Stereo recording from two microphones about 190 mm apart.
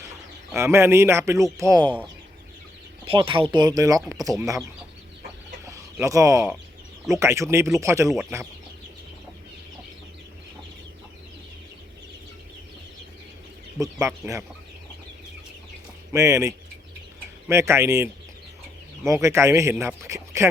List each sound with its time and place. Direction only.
0.5 s speech: 15° right (ahead or behind)
3.0 s speech: 25° right (ahead or behind)
6.0 s speech: 15° right (ahead or behind)
13.7 s speech: 15° right (ahead or behind)
16.1 s speech: 15° right (ahead or behind)